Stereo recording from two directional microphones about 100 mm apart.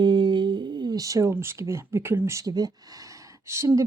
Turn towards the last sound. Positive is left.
turn(degrees=-30)  # may be behind; listen again after turning